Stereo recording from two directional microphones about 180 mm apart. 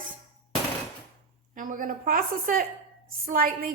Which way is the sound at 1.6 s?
50° right (ahead or behind).